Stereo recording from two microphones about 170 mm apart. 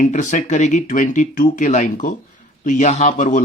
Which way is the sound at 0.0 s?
45° left (ahead or behind).